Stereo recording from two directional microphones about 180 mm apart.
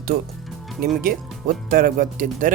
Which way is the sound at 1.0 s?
55° right (ahead or behind).